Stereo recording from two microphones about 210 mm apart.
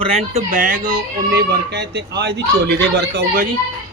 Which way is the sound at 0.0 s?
30° right (ahead or behind).